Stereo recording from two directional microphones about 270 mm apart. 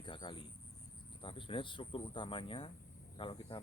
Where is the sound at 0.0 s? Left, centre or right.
Centre.